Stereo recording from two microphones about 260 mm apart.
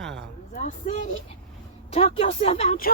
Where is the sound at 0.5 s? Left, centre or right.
Left.